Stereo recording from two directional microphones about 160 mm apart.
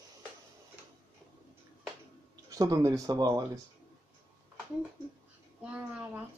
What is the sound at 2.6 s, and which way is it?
Speech, 20° right (ahead or behind).